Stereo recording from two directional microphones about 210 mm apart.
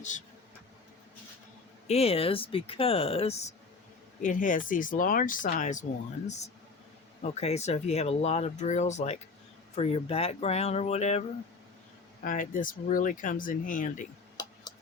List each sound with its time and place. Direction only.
1.9 s speech: 30° left (ahead or behind)